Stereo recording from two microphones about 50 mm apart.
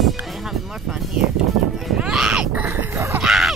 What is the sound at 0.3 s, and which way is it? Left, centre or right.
Music, centre.